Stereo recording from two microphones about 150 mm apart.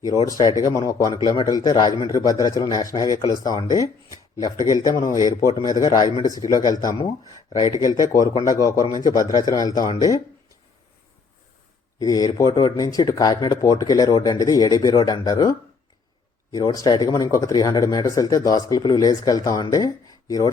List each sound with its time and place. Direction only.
0.3 s speech: 25° left (ahead or behind)
11.9 s speech: 25° left (ahead or behind)